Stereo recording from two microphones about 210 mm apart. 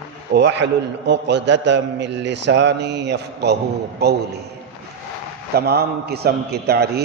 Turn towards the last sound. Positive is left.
turn(degrees=-50)  # may be behind; listen again after turning